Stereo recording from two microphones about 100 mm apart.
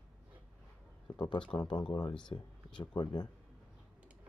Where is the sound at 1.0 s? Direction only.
50° left (ahead or behind).